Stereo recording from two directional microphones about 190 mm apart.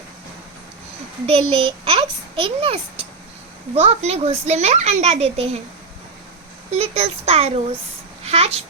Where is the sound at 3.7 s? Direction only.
30° right (ahead or behind).